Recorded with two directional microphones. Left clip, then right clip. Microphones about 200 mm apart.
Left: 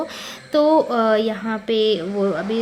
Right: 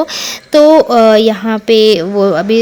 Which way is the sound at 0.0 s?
45° right (ahead or behind).